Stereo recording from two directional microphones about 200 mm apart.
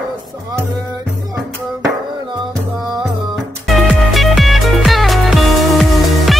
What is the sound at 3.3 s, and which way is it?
Music, centre (ahead or behind).